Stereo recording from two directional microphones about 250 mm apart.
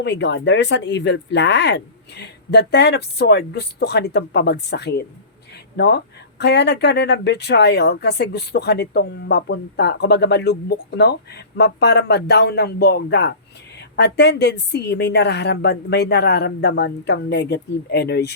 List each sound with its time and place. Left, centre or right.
0.0 s speech: left